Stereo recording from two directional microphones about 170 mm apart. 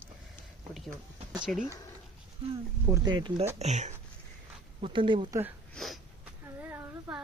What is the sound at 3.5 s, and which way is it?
Speech, 40° right (ahead or behind).